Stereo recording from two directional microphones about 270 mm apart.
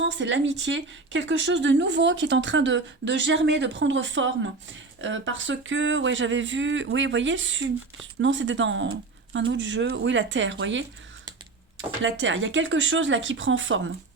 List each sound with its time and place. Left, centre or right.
0.0 s speech: right
12.0 s speech: right